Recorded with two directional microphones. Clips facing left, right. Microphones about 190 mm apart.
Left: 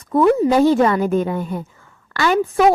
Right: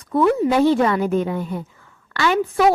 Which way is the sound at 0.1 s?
40° left (ahead or behind).